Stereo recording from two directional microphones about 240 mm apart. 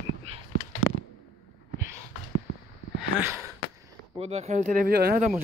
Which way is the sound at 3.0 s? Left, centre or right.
Centre.